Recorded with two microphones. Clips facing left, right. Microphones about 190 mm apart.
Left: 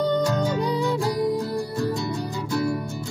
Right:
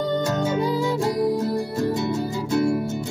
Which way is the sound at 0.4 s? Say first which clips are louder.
Right 1 dB; centre (ahead or behind).